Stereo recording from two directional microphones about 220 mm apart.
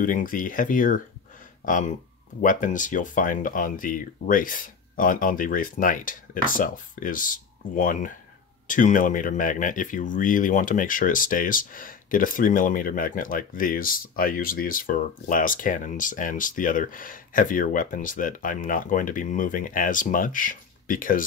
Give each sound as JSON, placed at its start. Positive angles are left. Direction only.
{"t": 0.0, "sound": "speech", "side_deg": 40}